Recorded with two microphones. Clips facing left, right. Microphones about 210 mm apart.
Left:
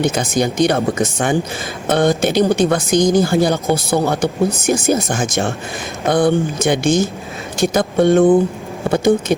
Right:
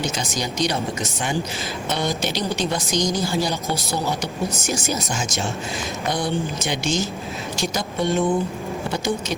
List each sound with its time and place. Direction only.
0.0 s a woman's voice: 55° left (ahead or behind)